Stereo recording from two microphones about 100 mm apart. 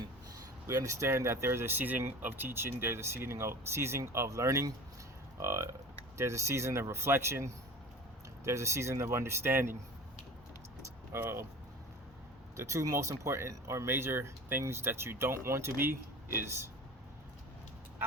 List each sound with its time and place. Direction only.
0.7 s speech: 30° right (ahead or behind)
11.1 s speech: 25° right (ahead or behind)
12.5 s speech: 30° right (ahead or behind)